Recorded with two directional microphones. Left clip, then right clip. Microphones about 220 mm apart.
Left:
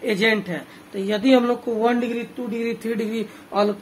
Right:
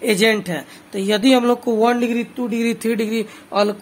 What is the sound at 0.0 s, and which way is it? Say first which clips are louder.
Speech: right 4 dB; 50° right (ahead or behind).